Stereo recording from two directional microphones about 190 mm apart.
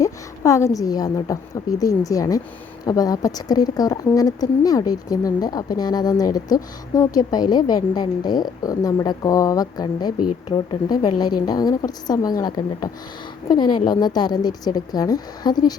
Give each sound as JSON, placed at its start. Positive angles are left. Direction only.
{"t": 0.0, "sound": "a woman's voice", "side_deg": 15}